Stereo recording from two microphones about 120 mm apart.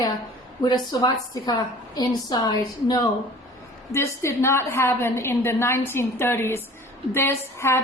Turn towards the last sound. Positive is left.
turn(degrees=20)  # may be behind; listen again after turning